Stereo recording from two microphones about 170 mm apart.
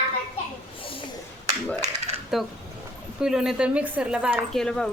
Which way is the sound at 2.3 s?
Centre (ahead or behind).